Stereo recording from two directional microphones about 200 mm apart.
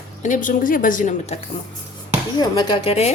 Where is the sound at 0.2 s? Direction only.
40° left (ahead or behind).